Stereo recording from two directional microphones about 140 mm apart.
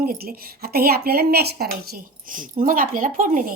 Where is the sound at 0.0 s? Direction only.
90° right.